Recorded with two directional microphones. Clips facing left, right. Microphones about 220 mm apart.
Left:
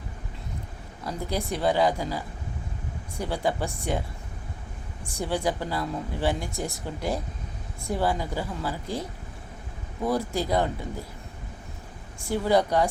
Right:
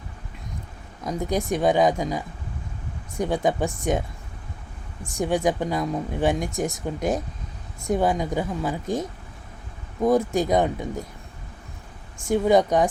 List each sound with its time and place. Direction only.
1.0 s speech: 20° right (ahead or behind)
5.1 s speech: 15° right (ahead or behind)
10.3 s speech: 15° right (ahead or behind)
12.3 s speech: 20° right (ahead or behind)